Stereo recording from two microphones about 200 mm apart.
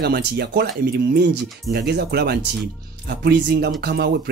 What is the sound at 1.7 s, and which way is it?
Speech, 55° right (ahead or behind).